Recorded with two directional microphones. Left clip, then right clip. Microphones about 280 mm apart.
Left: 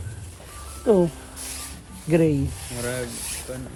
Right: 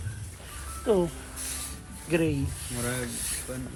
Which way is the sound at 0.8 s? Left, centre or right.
Left.